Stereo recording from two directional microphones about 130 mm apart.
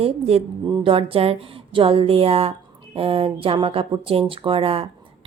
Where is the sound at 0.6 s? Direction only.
40° right (ahead or behind).